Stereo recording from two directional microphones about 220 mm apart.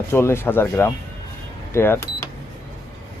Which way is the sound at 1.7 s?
10° left (ahead or behind).